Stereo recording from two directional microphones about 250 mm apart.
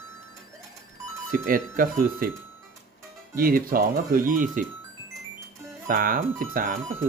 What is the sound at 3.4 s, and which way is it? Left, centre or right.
Speech, right.